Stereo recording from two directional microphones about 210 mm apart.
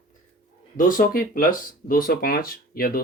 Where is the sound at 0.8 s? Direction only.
40° left (ahead or behind).